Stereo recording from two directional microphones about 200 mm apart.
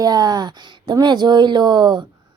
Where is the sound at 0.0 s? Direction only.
20° right (ahead or behind).